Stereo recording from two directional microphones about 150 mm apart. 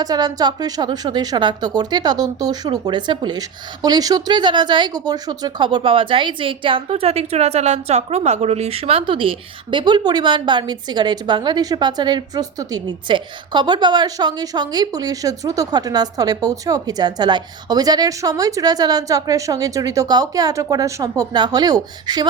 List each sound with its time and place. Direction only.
0.0 s a woman's voice: 25° right (ahead or behind)